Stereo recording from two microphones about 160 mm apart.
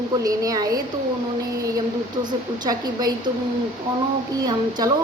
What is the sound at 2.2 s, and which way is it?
Speech, 25° right (ahead or behind).